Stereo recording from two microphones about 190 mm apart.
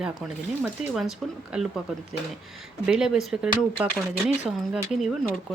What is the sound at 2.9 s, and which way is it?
Speech, 5° right (ahead or behind).